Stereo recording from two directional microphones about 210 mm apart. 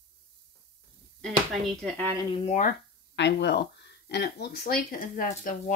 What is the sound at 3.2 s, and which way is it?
Speech, 55° left (ahead or behind).